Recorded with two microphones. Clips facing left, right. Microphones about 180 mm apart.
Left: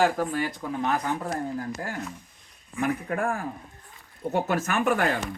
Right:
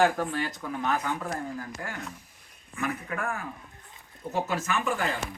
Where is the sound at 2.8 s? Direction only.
45° left (ahead or behind).